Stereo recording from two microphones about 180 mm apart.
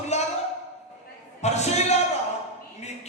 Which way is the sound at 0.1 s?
40° left (ahead or behind).